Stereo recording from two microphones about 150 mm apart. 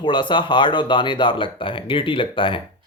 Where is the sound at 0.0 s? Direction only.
30° left (ahead or behind).